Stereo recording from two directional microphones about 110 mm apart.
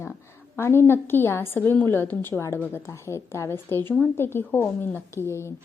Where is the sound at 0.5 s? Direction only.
20° left (ahead or behind).